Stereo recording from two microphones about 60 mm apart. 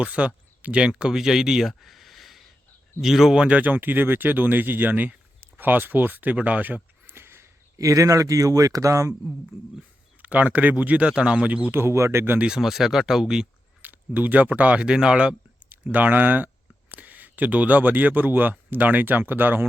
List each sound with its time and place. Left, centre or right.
0.0 s speech: centre
3.4 s speech: right
6.3 s a sound: right
7.8 s speech: right
10.2 s speech: right
11.7 s a man's voice: right
12.4 s speech: centre
13.8 s speech: right
15.9 s speech: right